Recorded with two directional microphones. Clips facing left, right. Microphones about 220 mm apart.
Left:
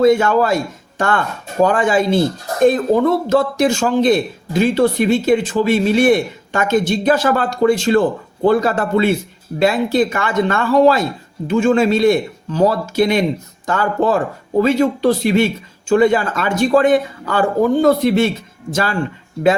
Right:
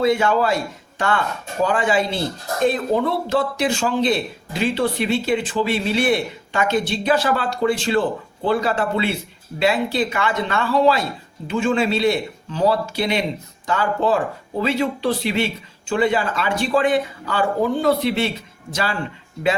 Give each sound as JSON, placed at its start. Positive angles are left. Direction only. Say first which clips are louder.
{"t": 0.0, "sound": "speech", "louder": "left 5 dB", "side_deg": 45}